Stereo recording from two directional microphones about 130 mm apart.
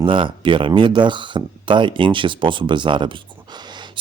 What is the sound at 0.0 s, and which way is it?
Speech, 40° right (ahead or behind).